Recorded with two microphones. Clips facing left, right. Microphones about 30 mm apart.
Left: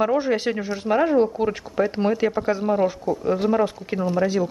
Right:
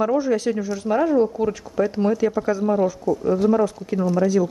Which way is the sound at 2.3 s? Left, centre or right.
Left.